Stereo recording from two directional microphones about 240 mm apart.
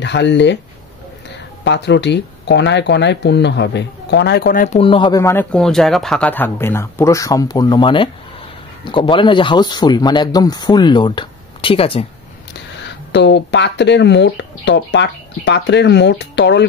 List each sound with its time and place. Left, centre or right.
0.0 s speech: left
1.6 s speech: left
13.1 s speech: left